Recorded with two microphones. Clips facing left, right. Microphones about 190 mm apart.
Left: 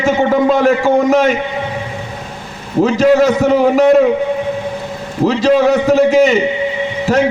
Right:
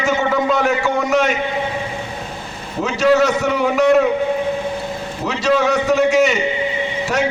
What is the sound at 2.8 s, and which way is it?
A man's voice, 35° left (ahead or behind).